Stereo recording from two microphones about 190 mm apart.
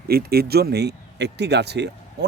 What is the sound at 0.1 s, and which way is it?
Speech, 55° right (ahead or behind).